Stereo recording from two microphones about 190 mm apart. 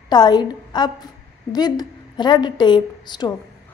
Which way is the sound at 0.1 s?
20° left (ahead or behind).